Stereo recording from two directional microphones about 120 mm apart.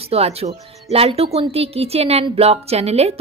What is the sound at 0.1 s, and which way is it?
A woman's voice, 60° right (ahead or behind).